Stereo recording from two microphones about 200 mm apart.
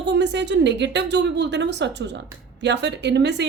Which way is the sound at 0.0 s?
60° right (ahead or behind).